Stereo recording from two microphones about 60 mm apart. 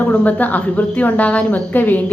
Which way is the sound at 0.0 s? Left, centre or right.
Left.